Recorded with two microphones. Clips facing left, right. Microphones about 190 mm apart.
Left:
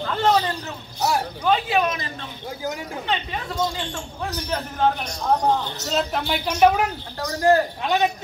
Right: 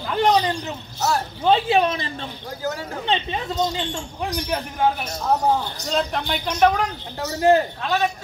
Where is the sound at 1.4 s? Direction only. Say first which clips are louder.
Right 4 dB; 25° right (ahead or behind); by 5.7 s 10° right (ahead or behind).